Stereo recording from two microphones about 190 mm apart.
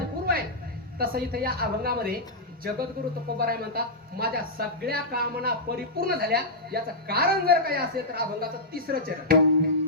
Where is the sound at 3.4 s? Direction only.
55° right (ahead or behind).